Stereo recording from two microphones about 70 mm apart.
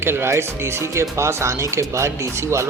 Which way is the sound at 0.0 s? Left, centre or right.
Right.